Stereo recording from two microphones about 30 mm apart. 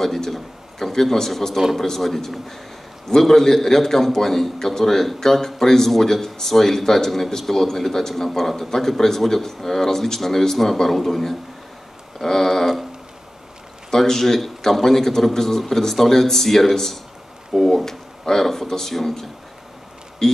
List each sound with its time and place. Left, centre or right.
0.0 s a man's voice: centre
13.8 s a man's voice: centre
17.8 s a sound: centre
18.4 s a man's voice: centre